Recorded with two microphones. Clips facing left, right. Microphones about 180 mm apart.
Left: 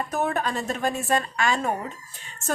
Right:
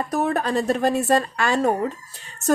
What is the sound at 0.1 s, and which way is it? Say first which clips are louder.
A woman's voice: right 5 dB; 35° right (ahead or behind).